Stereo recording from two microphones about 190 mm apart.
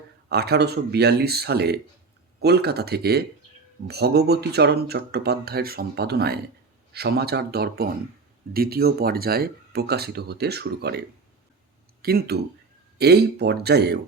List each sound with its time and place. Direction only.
0.3 s speech: 60° right (ahead or behind)
12.0 s speech: 55° right (ahead or behind)